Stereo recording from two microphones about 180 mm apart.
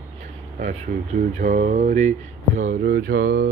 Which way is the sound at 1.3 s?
45° right (ahead or behind).